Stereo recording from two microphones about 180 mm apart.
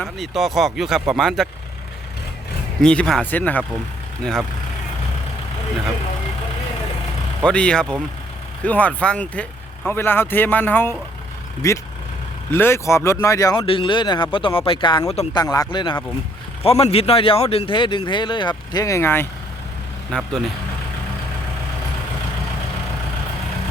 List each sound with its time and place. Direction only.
0.0 s speech: centre (ahead or behind)
2.8 s speech: 5° left (ahead or behind)
7.4 s speech: 5° left (ahead or behind); by 15.3 s 35° left (ahead or behind)
15.3 s speech: 20° left (ahead or behind)
20.1 s speech: centre (ahead or behind)